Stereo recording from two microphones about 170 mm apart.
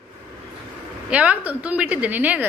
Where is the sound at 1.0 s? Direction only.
10° right (ahead or behind).